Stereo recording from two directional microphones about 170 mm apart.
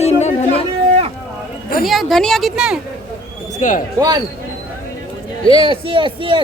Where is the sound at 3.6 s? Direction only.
45° left (ahead or behind).